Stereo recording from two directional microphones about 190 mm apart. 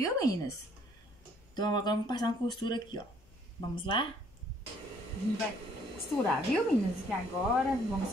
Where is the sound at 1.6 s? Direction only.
20° left (ahead or behind).